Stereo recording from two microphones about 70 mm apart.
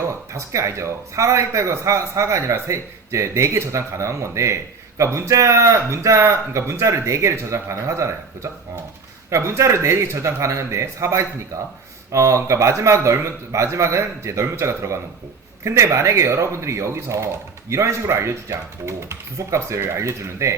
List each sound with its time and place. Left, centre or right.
0.1 s speech: right